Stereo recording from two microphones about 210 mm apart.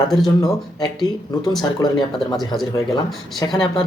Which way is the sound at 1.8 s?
20° left (ahead or behind).